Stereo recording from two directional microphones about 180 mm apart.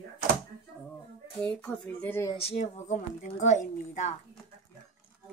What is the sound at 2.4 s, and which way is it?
A woman's voice, 35° left (ahead or behind).